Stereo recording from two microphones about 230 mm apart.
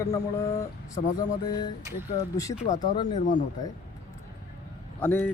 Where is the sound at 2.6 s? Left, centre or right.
Left.